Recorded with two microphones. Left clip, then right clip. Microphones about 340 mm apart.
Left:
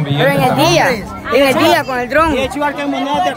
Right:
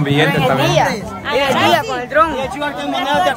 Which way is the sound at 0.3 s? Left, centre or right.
Left.